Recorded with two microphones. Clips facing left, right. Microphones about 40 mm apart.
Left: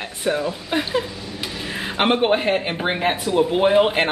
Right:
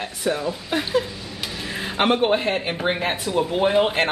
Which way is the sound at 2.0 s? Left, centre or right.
Centre.